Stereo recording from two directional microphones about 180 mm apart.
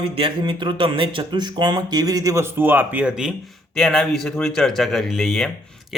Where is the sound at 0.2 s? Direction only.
25° right (ahead or behind).